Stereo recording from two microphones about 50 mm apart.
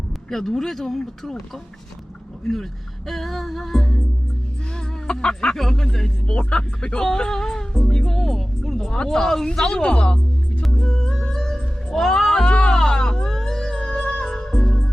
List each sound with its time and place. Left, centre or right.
0.3 s speech: centre
3.1 s music: centre
5.0 s speech: centre
5.5 s speech: centre
6.2 s speech: left
10.8 s music: centre